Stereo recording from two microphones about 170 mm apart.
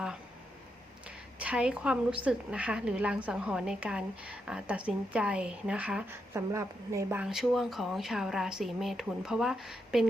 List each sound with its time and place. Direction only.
1.4 s a woman's voice: 5° right (ahead or behind)
7.2 s speech: 5° right (ahead or behind)